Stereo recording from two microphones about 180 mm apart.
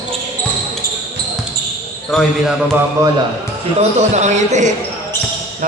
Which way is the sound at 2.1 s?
5° left (ahead or behind).